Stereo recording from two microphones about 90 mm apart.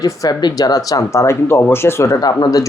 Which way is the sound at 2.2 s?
45° left (ahead or behind).